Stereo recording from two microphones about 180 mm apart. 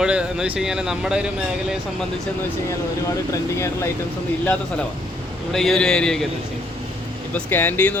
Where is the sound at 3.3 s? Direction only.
15° left (ahead or behind).